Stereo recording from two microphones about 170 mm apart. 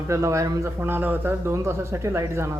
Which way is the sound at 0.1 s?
20° right (ahead or behind).